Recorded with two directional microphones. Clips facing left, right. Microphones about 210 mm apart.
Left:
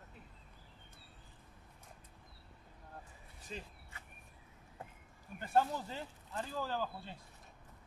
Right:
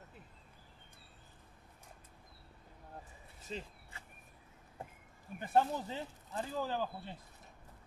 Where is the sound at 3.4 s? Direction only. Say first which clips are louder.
Right 3 dB; 25° right (ahead or behind).